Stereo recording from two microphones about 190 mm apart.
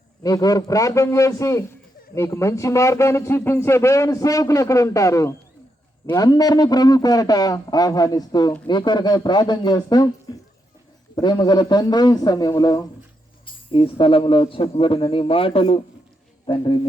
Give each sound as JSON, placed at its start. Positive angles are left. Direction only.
{"t": 0.2, "sound": "a man's voice", "side_deg": 20}
{"t": 11.1, "sound": "a man's voice", "side_deg": 25}